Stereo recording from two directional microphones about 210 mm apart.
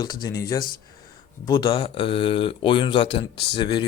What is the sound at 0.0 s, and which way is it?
Speech, 20° left (ahead or behind).